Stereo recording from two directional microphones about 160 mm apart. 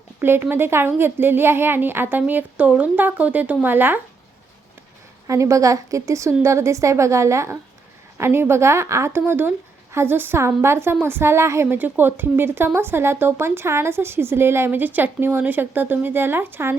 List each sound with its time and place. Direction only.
0.2 s a woman's voice: 15° right (ahead or behind)
5.3 s a woman's voice: 20° right (ahead or behind)